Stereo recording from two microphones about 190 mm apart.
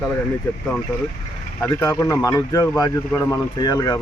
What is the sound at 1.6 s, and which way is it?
Speech, 10° left (ahead or behind).